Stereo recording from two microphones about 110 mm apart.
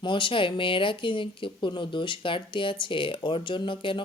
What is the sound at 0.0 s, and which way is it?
Speech, 50° left (ahead or behind).